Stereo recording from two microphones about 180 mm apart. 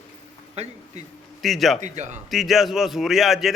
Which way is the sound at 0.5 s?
35° right (ahead or behind).